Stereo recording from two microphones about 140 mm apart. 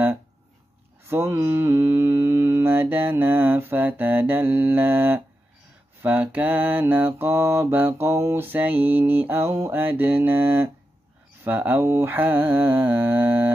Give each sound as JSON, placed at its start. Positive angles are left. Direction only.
{"t": 1.0, "sound": "mantra", "side_deg": -15}